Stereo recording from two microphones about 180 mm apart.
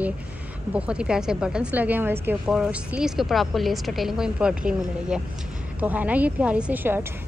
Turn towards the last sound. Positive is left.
turn(degrees=-10)  # may be behind; listen again after turning